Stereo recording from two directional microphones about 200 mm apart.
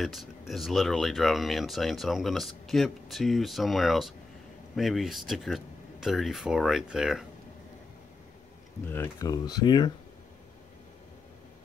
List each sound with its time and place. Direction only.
0.0 s speech: centre (ahead or behind)
8.8 s speech: 10° left (ahead or behind)